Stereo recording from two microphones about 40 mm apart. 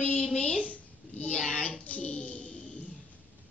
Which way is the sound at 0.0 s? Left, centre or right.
Left.